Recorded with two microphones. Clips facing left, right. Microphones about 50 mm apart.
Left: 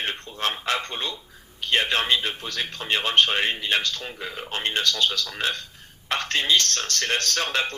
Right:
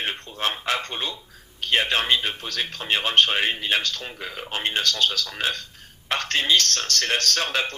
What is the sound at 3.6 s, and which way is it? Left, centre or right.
Speech, centre.